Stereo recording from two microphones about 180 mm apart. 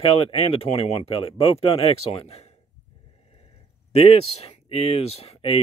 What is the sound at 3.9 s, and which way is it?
Speech, 35° left (ahead or behind).